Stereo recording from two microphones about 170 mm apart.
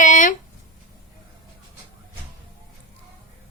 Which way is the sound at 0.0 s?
50° left (ahead or behind).